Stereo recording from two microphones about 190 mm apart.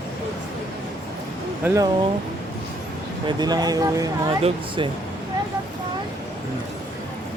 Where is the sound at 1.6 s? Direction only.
15° right (ahead or behind).